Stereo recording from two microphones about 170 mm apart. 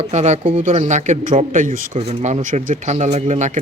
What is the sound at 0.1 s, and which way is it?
Speech, 40° right (ahead or behind).